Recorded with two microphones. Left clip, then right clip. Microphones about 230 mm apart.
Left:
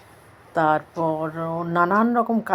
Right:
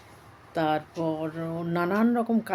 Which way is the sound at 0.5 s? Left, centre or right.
Centre.